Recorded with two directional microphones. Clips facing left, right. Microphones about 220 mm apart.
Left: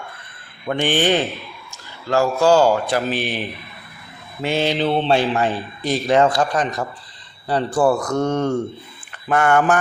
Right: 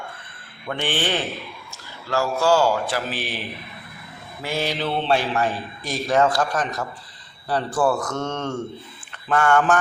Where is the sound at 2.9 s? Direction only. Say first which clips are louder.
Left 6 dB; 20° left (ahead or behind).